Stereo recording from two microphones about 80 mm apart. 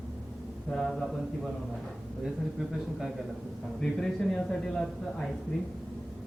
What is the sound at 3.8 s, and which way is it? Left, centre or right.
A man's voice, centre.